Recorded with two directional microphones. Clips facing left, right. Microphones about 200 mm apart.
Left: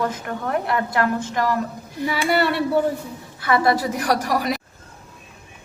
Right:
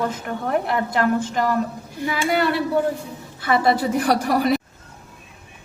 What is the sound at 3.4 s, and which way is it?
A woman's voice, 25° right (ahead or behind).